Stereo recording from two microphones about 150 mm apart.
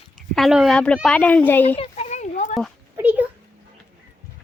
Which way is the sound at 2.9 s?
10° right (ahead or behind).